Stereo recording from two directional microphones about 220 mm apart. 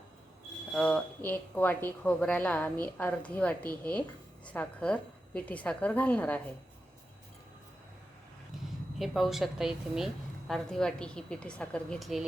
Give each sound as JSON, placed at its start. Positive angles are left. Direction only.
{"t": 0.7, "sound": "speech", "side_deg": 5}
{"t": 9.0, "sound": "a woman's voice", "side_deg": 0}